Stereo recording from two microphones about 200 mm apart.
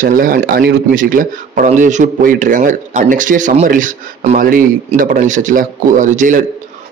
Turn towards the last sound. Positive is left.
turn(degrees=-40)  # may be behind; listen again after turning